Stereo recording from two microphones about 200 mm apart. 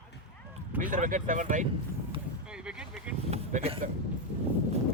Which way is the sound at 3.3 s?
30° right (ahead or behind).